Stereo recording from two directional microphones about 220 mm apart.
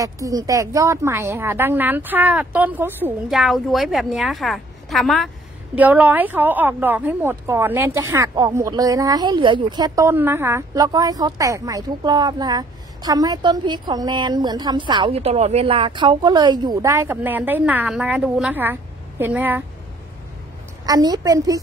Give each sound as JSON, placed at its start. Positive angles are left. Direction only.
{"t": 0.0, "sound": "speech", "side_deg": -15}
{"t": 20.8, "sound": "speech", "side_deg": -15}